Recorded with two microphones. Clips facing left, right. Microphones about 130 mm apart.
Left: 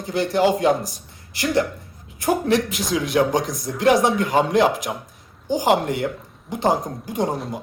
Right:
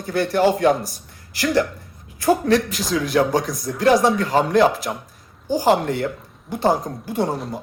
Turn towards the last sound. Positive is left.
turn(degrees=20)  # may be behind; listen again after turning